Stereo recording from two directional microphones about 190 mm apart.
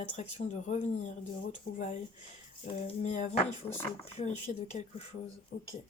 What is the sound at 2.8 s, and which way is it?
Speech, 35° left (ahead or behind).